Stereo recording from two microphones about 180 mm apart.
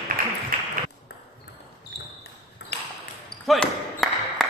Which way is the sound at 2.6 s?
70° left (ahead or behind).